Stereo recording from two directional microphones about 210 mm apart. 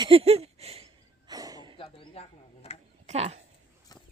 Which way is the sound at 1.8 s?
25° left (ahead or behind).